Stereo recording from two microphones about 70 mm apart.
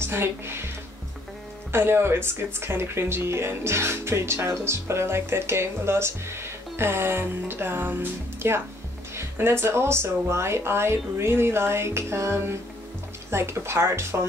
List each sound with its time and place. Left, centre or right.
0.0 s speech: right
1.7 s speech: right